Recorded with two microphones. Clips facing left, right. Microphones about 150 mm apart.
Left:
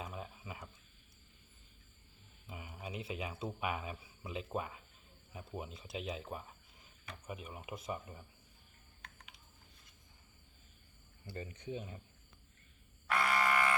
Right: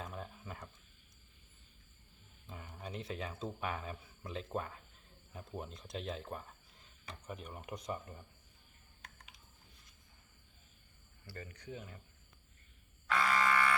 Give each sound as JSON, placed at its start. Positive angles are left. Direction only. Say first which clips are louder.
{"t": 0.0, "sound": "a sound", "louder": "even", "side_deg": 5}
{"t": 2.5, "sound": "speech", "louder": "even", "side_deg": 10}
{"t": 11.3, "sound": "speech", "louder": "left 4 dB", "side_deg": 20}
{"t": 13.1, "sound": "frog", "louder": "right 1 dB", "side_deg": 15}